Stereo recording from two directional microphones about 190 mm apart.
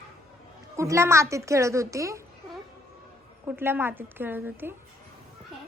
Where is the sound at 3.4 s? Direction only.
10° right (ahead or behind).